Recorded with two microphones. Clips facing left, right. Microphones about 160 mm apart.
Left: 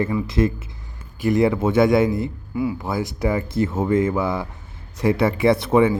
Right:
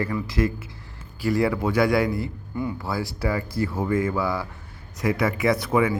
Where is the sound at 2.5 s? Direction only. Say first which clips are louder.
Left 5 dB; 5° left (ahead or behind).